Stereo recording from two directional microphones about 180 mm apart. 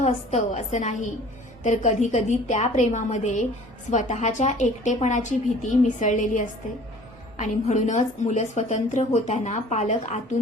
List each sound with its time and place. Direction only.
0.0 s a woman's voice: 40° left (ahead or behind)